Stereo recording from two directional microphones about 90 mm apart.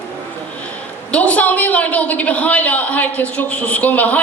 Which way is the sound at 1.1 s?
15° left (ahead or behind).